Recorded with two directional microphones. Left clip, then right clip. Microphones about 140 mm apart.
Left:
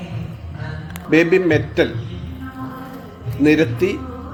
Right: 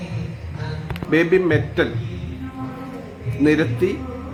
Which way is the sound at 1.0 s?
15° left (ahead or behind).